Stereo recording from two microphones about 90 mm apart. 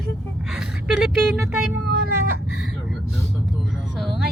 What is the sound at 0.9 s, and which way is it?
Speech, 5° right (ahead or behind).